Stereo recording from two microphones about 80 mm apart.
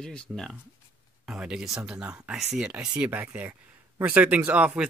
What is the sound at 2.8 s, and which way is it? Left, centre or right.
Speech, centre.